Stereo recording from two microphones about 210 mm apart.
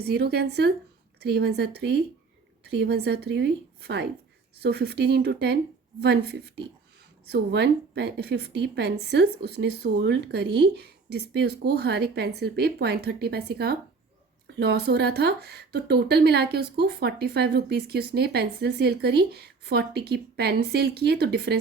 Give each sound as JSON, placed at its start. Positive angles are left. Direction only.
{"t": 0.0, "sound": "speech", "side_deg": -50}